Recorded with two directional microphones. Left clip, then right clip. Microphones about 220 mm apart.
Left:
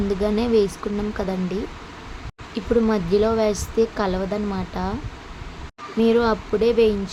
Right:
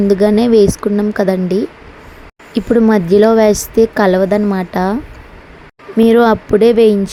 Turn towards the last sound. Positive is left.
turn(degrees=-35)  # may be behind; listen again after turning